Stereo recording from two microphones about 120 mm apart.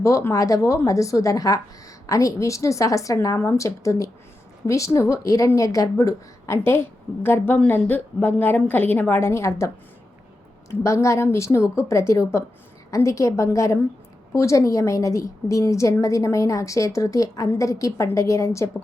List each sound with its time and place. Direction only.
0.0 s speech: 25° left (ahead or behind)